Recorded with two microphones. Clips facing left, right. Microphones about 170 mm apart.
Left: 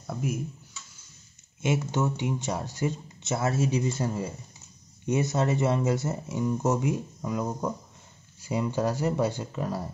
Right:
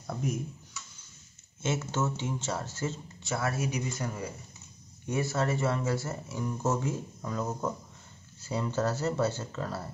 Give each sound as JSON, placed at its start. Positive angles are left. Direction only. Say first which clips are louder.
{"t": 0.0, "sound": "speech", "louder": "left 2 dB", "side_deg": 5}
{"t": 1.6, "sound": "speech", "louder": "left 4 dB", "side_deg": 15}